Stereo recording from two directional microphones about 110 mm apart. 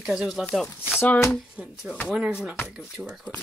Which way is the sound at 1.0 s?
15° left (ahead or behind).